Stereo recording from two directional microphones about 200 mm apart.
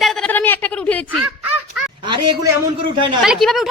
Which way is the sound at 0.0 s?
Centre (ahead or behind).